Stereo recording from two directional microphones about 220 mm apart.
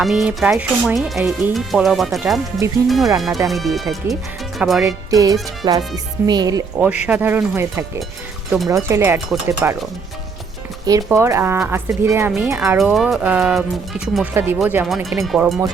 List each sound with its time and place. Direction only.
0.0 s speech: centre (ahead or behind)
5.1 s speech: 15° right (ahead or behind)
8.4 s speech: centre (ahead or behind)
8.7 s speech: 10° right (ahead or behind)
10.8 s speech: 15° right (ahead or behind)
12.8 s speech: centre (ahead or behind)